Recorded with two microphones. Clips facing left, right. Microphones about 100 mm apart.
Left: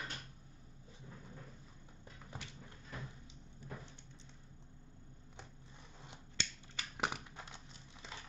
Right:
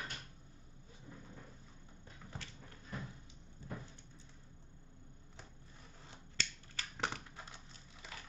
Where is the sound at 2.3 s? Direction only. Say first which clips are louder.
Even; 15° left (ahead or behind).